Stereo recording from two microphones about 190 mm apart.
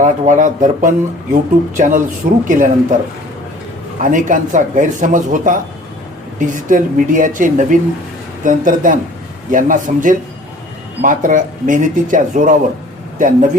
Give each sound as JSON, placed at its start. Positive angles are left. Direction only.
{"t": 0.0, "sound": "speech", "side_deg": -40}
{"t": 4.0, "sound": "speech", "side_deg": -45}